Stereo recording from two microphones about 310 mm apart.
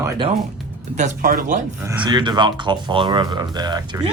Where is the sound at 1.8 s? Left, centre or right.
Centre.